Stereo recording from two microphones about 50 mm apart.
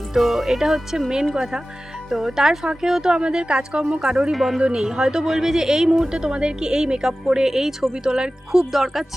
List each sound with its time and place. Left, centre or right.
0.1 s speech: centre; by 4.1 s right
4.1 s speech: centre
8.7 s speech: centre